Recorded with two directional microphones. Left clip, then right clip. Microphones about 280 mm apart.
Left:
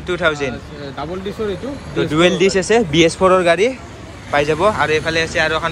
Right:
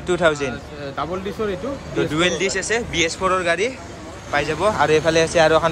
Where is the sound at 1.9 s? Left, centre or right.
Centre.